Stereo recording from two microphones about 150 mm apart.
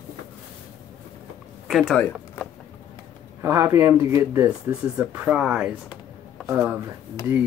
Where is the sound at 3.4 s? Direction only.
15° right (ahead or behind).